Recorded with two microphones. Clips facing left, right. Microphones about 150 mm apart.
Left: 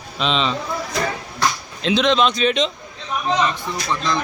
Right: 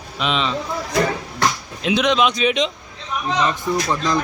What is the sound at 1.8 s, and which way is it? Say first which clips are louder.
Speech: even; 10° right (ahead or behind).